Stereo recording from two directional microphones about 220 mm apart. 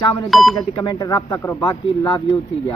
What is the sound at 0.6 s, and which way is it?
Speech, 20° left (ahead or behind).